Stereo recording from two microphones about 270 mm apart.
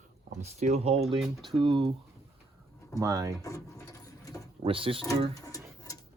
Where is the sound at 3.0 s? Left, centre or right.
Centre.